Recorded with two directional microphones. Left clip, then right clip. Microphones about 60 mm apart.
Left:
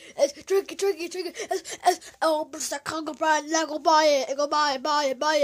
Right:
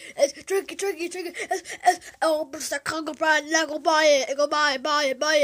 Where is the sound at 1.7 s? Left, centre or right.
Left.